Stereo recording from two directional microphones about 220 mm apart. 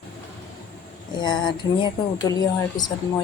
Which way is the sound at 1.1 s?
20° left (ahead or behind).